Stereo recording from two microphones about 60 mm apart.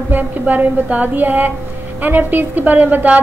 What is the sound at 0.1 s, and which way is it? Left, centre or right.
A woman's voice, right.